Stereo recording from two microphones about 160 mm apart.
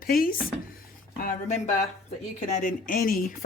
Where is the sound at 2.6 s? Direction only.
60° left (ahead or behind).